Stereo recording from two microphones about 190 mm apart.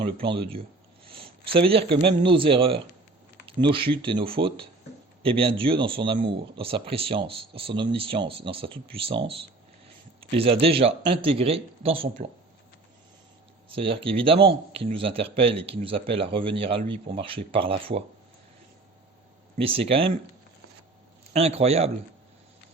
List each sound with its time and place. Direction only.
0.0 s speech: 25° right (ahead or behind)
13.7 s speech: 30° right (ahead or behind)
19.5 s speech: 30° right (ahead or behind)
21.3 s a man's voice: 35° right (ahead or behind)